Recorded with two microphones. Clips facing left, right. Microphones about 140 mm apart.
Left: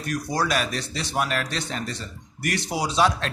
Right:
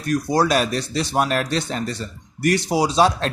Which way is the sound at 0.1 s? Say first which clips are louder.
Right 7 dB; 35° right (ahead or behind).